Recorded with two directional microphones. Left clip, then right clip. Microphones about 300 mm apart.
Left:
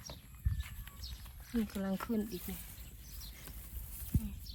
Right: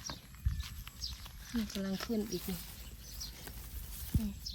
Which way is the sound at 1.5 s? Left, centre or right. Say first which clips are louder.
Left 1 dB; centre.